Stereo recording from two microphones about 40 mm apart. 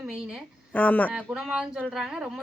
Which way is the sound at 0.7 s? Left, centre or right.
Left.